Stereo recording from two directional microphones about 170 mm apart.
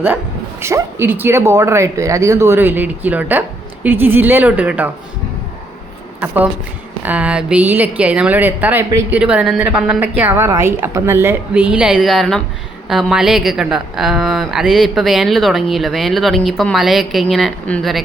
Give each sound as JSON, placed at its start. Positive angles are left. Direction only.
{"t": 0.6, "sound": "a woman's voice", "side_deg": -15}
{"t": 6.1, "sound": "a woman's voice", "side_deg": -10}